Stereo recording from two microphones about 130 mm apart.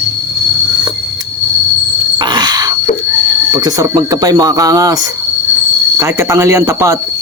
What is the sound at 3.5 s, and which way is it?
Speech, 30° right (ahead or behind).